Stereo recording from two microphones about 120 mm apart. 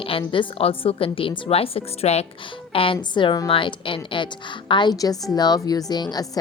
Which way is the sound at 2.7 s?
45° left (ahead or behind).